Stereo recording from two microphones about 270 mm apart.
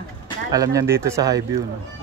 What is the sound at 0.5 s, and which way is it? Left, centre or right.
Speech, centre.